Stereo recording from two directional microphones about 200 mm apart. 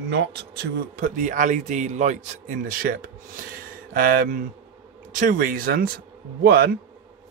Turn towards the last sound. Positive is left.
turn(degrees=-50)  # may be behind; listen again after turning